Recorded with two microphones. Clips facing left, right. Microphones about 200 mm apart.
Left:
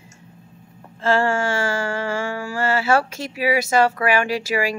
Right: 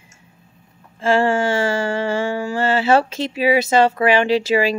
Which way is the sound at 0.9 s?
15° right (ahead or behind).